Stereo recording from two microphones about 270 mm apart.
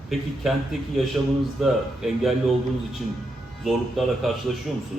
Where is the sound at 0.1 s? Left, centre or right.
Centre.